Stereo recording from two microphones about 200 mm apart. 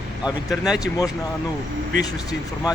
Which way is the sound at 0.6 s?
5° right (ahead or behind).